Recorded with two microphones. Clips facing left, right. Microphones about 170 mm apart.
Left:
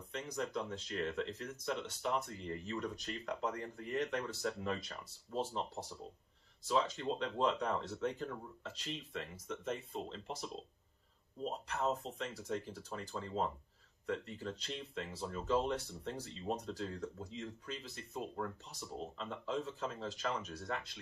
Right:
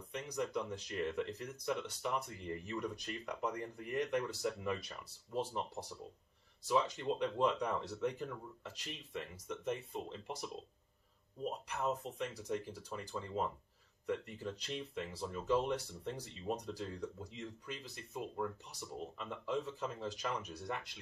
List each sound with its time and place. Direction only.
0.1 s speech: 10° right (ahead or behind)
12.2 s speech: 10° right (ahead or behind)